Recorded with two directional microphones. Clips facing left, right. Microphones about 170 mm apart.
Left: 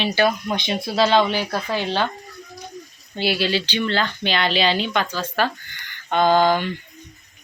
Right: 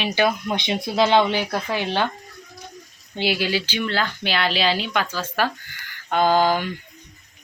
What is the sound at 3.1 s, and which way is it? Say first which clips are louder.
Speech: left 1 dB; 15° right (ahead or behind).